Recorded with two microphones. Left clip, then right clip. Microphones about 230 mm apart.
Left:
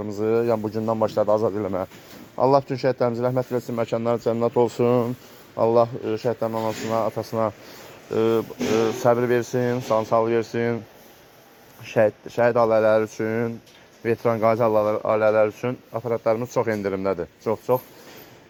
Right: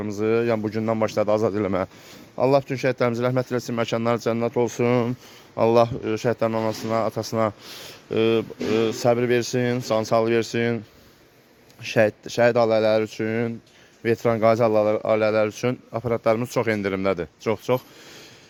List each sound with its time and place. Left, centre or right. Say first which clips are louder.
0.0 s speech: even; right
1.4 s speech: right 1 dB; right
2.3 s speech: left 1 dB; right
3.7 s speech: even; right
4.0 s speech: left 1 dB; right
4.4 s speech: left 4 dB; centre; by 7.1 s right
8.1 s speech: even; right
8.7 s speech: left 1 dB; right
9.0 s speech: left 1 dB; right
11.9 s speech: even; right